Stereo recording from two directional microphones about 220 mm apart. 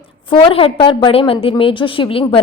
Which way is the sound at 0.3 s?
20° left (ahead or behind).